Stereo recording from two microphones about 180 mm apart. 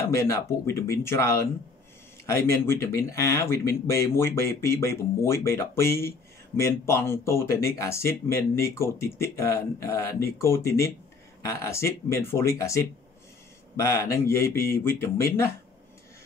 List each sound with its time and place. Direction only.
0.1 s speech: 15° left (ahead or behind)